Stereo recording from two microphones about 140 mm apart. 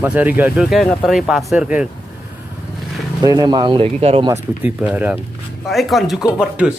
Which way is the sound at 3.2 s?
30° right (ahead or behind).